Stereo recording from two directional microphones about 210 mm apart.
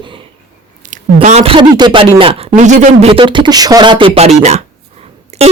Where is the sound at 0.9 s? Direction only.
35° right (ahead or behind).